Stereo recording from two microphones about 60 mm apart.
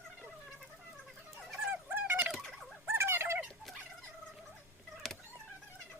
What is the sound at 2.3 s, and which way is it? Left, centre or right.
Fowl, centre.